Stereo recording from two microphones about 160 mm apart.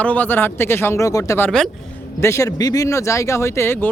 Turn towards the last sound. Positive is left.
turn(degrees=15)  # may be behind; listen again after turning